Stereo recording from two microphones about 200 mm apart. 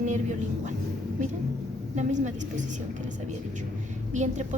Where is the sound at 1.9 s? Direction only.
35° right (ahead or behind).